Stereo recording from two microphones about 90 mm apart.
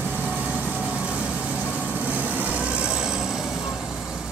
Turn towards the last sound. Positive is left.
turn(degrees=-5)  # may be behind; listen again after turning